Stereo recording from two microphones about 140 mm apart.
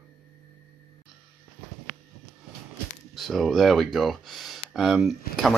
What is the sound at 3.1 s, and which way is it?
Speech, centre (ahead or behind).